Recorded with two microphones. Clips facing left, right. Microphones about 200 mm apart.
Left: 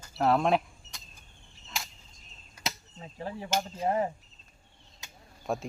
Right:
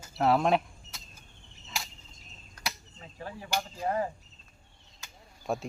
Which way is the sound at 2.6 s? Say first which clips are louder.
Left 2 dB; 10° left (ahead or behind).